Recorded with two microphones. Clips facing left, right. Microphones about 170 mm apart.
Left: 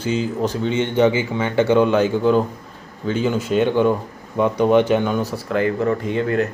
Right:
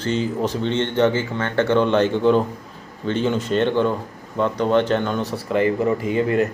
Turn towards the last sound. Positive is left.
turn(degrees=-5)  # may be behind; listen again after turning